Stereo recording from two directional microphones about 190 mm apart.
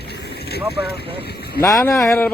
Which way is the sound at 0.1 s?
60° left (ahead or behind).